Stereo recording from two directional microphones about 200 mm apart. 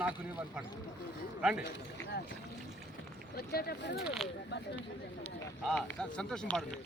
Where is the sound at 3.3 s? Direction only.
50° left (ahead or behind).